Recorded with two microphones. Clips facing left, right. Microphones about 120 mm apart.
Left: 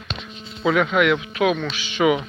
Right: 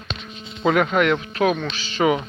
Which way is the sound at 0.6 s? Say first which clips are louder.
Even; 45° right (ahead or behind).